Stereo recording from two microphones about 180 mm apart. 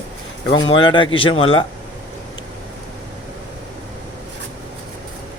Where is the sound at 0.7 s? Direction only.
25° left (ahead or behind).